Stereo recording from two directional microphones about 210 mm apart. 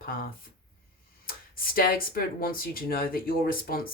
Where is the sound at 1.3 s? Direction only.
45° left (ahead or behind).